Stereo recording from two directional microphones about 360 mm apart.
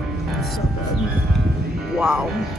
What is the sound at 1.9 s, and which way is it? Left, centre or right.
Speech, centre.